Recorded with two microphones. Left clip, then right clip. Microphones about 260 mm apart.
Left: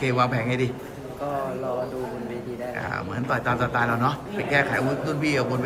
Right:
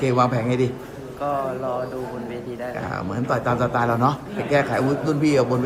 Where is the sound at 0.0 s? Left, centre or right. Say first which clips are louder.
Right 3 dB; centre.